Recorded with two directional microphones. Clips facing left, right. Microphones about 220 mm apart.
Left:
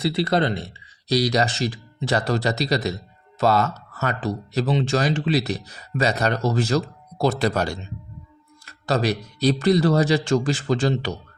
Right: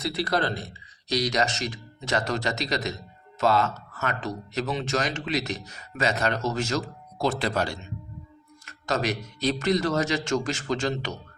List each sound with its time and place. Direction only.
0.0 s speech: 25° left (ahead or behind)